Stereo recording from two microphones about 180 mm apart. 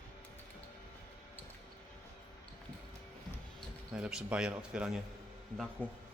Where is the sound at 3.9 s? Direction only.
5° right (ahead or behind).